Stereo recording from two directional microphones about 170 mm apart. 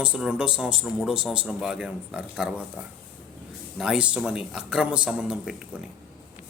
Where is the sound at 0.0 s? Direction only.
5° right (ahead or behind).